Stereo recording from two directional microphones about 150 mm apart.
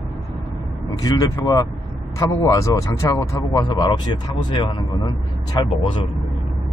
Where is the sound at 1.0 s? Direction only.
25° left (ahead or behind).